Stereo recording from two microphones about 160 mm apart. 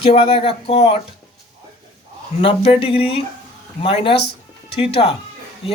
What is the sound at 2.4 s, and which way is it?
Speech, 35° left (ahead or behind).